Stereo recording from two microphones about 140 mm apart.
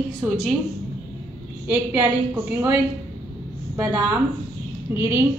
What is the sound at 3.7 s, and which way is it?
A woman's voice, 15° right (ahead or behind).